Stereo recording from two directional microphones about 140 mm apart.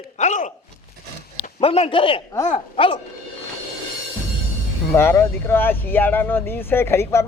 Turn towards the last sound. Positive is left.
turn(degrees=20)  # may be behind; listen again after turning